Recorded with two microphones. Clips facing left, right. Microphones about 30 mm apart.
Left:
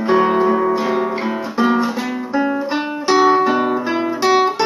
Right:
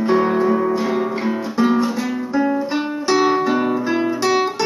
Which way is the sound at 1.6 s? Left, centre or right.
Centre.